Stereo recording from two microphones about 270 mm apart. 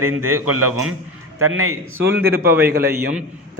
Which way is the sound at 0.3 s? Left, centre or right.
Right.